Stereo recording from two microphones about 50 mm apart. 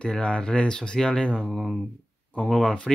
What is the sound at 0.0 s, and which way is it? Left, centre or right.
Speech, left.